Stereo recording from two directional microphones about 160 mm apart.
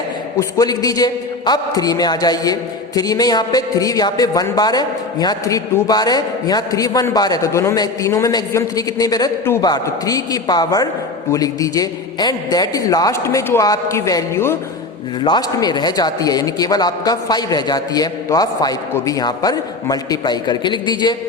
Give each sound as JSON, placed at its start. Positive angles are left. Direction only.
{"t": 0.3, "sound": "a man's voice", "side_deg": 20}